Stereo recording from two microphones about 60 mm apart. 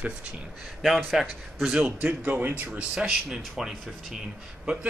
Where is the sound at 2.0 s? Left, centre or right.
Right.